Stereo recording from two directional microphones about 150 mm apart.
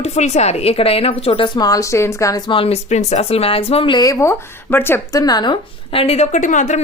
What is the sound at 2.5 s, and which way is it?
A woman's voice, 40° left (ahead or behind).